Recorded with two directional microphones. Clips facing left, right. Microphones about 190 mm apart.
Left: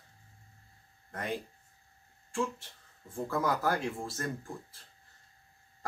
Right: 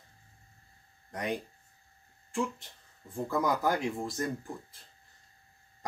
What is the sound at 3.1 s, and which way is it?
Speech, 15° right (ahead or behind).